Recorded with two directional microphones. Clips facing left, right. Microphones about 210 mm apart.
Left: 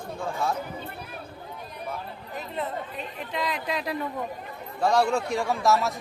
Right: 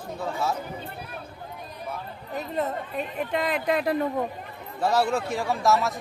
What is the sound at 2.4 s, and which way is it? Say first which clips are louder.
Speech: right 4 dB; 45° right (ahead or behind).